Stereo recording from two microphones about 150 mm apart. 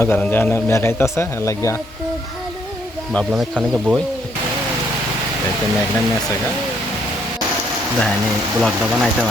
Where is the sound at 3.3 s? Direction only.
5° right (ahead or behind).